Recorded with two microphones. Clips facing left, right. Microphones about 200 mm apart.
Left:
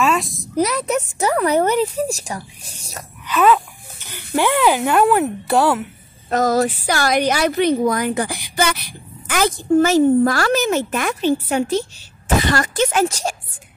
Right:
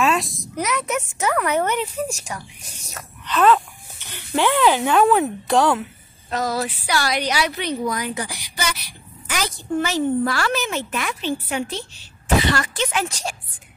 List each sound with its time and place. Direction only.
0.0 s a sound: centre (ahead or behind)
0.6 s speech: 35° left (ahead or behind)
3.3 s speech: 5° left (ahead or behind)
6.3 s speech: 45° left (ahead or behind)